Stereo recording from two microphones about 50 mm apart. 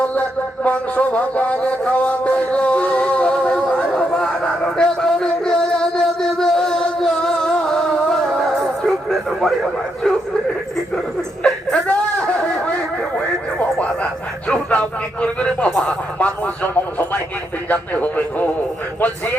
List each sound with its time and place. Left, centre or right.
0.1 s music: left
3.9 s a sound: centre
11.4 s whimper: centre
13.1 s radio: left
14.7 s a sound: left
17.7 s a man's voice: left